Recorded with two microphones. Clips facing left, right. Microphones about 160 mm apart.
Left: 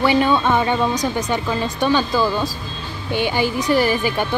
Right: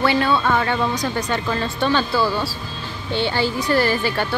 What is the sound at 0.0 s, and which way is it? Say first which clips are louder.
Speech: left 2 dB; 15° left (ahead or behind).